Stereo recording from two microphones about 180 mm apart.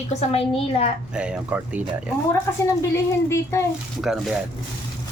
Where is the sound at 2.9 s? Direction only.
15° left (ahead or behind).